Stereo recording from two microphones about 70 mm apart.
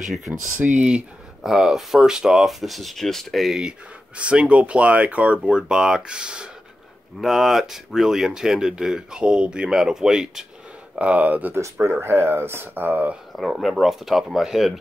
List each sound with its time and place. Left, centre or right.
0.6 s speech: centre
4.2 s speech: centre
11.8 s speech: right
13.3 s speech: centre